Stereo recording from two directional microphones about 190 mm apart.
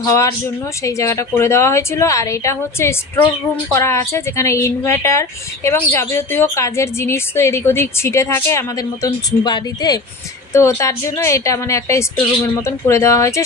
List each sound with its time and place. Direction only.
0.0 s a woman's voice: 15° left (ahead or behind)